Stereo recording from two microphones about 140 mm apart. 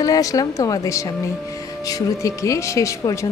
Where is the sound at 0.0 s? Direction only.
25° left (ahead or behind).